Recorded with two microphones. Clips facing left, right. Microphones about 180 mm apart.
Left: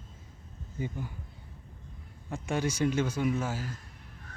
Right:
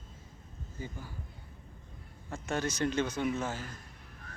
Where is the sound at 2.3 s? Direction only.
10° left (ahead or behind).